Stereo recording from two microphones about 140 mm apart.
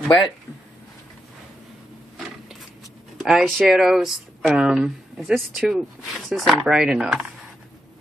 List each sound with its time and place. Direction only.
3.2 s speech: centre (ahead or behind)